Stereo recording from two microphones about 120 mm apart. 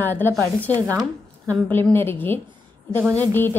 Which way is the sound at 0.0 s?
15° left (ahead or behind).